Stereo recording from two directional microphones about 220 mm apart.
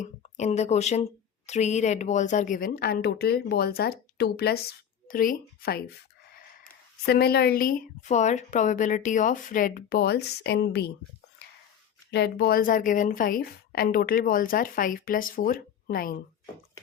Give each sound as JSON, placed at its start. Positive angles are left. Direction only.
{"t": 0.0, "sound": "a woman's voice", "side_deg": 30}
{"t": 7.0, "sound": "a woman's voice", "side_deg": 45}
{"t": 12.1, "sound": "a woman's voice", "side_deg": 50}